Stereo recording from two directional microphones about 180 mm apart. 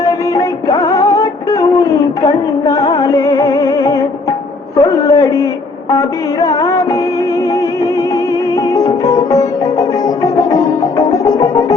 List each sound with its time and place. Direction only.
0.0 s music: 20° left (ahead or behind)
4.8 s a sound: 20° left (ahead or behind)
5.9 s music: 20° left (ahead or behind)
8.7 s music: 20° left (ahead or behind)